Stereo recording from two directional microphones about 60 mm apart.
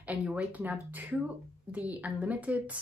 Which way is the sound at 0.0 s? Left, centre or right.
Right.